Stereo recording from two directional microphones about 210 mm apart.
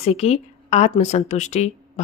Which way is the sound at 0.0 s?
30° left (ahead or behind).